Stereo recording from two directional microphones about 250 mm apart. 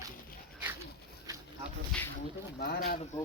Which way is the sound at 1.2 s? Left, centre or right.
Centre.